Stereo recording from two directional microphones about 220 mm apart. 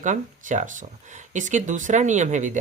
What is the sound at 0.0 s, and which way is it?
Speech, 35° right (ahead or behind).